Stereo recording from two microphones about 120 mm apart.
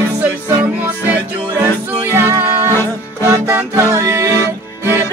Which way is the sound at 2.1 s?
20° right (ahead or behind).